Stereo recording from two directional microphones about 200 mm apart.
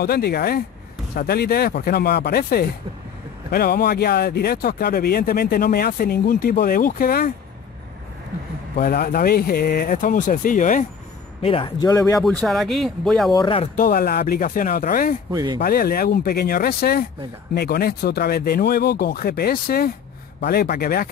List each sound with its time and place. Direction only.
0.0 s speech: 50° left (ahead or behind)
8.7 s speech: 50° left (ahead or behind)
11.4 s speech: 25° left (ahead or behind)
12.2 s speech: centre (ahead or behind)
13.3 s speech: 25° left (ahead or behind)
13.7 s speech: 45° left (ahead or behind)
15.3 s speech: 20° right (ahead or behind)
15.6 s speech: 50° left (ahead or behind)